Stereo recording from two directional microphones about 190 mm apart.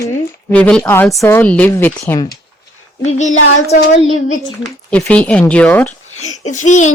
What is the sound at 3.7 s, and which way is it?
Speech, 40° left (ahead or behind).